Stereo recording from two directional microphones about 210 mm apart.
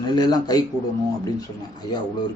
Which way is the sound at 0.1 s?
20° left (ahead or behind).